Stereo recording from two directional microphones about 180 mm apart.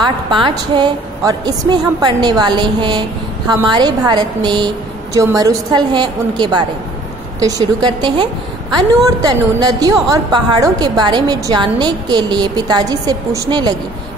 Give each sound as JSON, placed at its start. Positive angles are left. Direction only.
{"t": 0.0, "sound": "a woman's voice", "side_deg": -25}